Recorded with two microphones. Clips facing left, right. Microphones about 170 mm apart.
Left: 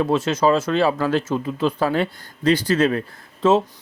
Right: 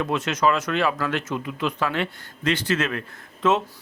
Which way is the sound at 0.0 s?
30° left (ahead or behind).